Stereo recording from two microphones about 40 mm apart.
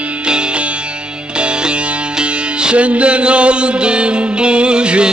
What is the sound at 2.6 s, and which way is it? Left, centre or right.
Music, right.